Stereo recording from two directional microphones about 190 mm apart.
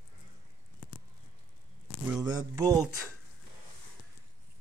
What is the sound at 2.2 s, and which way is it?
Speech, 20° right (ahead or behind).